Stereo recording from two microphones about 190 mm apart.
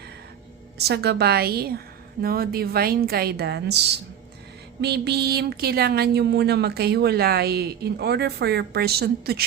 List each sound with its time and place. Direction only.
0.8 s a woman's voice: 60° right (ahead or behind)
4.8 s a woman's voice: 60° right (ahead or behind)